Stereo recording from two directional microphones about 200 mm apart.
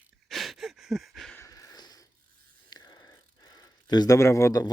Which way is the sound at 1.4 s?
15° left (ahead or behind).